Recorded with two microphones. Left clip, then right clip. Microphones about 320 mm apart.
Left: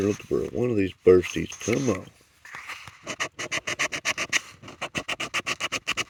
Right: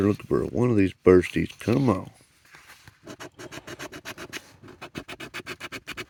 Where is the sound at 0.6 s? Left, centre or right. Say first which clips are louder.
Right 1 dB; right.